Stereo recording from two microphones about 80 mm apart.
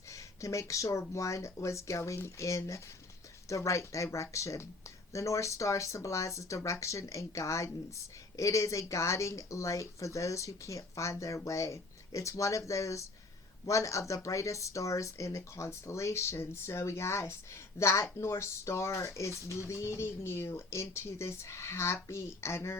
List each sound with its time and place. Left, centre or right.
0.1 s speech: left